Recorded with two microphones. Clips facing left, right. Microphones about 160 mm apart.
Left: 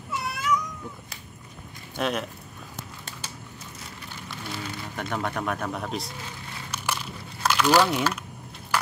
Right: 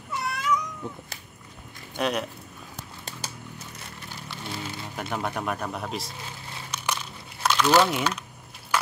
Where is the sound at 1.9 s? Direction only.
Centre (ahead or behind).